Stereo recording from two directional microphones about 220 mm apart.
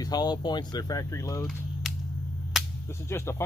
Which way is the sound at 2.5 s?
Centre (ahead or behind).